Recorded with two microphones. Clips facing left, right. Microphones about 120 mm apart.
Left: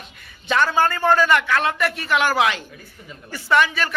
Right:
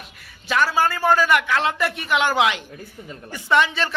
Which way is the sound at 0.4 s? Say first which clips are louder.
Left 1 dB; 5° right (ahead or behind).